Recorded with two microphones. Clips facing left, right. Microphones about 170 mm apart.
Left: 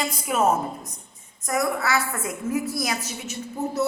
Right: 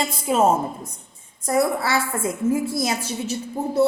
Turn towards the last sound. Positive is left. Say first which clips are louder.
# right 5 dB
turn(degrees=-30)  # may be behind; listen again after turning